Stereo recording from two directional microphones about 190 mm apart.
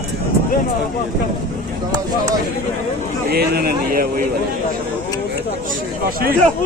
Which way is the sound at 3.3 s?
55° right (ahead or behind).